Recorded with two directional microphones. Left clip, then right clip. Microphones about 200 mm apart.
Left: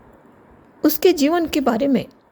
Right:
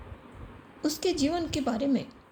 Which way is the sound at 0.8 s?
55° left (ahead or behind).